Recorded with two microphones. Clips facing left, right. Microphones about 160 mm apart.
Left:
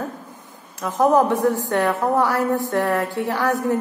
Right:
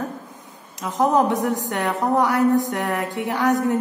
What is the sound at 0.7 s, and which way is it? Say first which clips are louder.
A woman's voice: left 2 dB; 15° right (ahead or behind).